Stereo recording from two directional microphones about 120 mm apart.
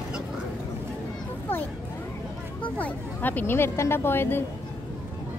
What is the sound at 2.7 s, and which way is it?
Speech, 15° left (ahead or behind).